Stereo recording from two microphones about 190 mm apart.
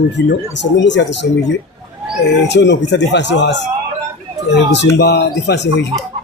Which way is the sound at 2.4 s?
65° left (ahead or behind).